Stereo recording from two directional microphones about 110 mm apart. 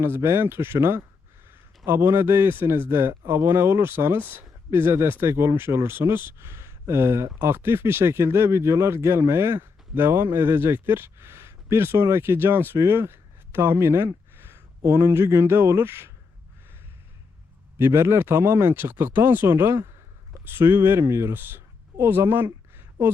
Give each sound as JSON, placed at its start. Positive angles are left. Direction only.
{"t": 0.0, "sound": "speech", "side_deg": -25}
{"t": 17.7, "sound": "speech", "side_deg": -20}
{"t": 22.7, "sound": "a sound", "side_deg": -20}